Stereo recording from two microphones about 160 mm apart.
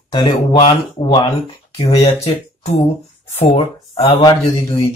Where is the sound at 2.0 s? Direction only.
40° left (ahead or behind).